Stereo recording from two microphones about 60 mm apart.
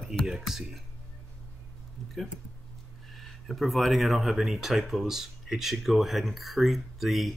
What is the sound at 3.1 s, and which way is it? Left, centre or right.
Speech, centre.